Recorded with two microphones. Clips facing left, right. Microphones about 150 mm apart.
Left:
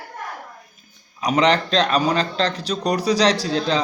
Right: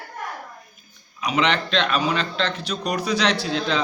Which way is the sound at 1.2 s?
40° left (ahead or behind).